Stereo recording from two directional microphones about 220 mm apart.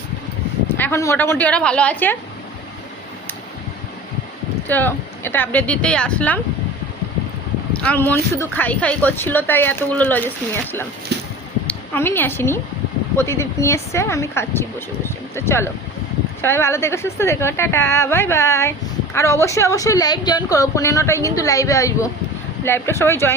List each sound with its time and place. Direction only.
0.8 s speech: 10° left (ahead or behind)
4.7 s speech: 10° left (ahead or behind)
7.8 s speech: 5° left (ahead or behind)
11.1 s a sound: 50° right (ahead or behind)
11.6 s a woman's voice: 10° left (ahead or behind)